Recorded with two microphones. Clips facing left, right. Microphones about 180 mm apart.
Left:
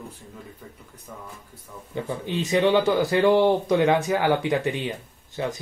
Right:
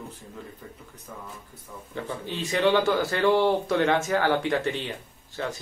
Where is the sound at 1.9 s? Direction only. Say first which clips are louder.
Left 5 dB; 15° left (ahead or behind).